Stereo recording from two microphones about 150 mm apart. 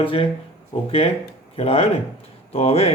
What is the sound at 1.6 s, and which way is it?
Speech, 40° left (ahead or behind).